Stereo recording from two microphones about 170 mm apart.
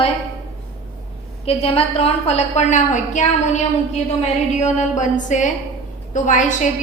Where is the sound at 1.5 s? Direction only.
35° left (ahead or behind).